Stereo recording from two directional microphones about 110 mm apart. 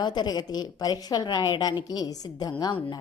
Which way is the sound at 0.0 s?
40° left (ahead or behind).